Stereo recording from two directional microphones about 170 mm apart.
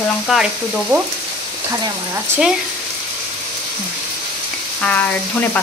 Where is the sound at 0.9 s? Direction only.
20° right (ahead or behind).